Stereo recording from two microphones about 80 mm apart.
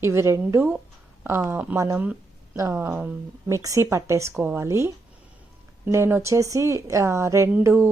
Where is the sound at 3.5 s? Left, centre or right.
Right.